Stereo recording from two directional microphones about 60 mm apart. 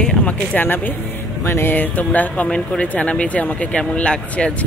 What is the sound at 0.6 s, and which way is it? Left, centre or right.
Speech, left.